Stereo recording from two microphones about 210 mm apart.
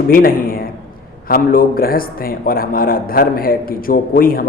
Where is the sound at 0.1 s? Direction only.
45° left (ahead or behind).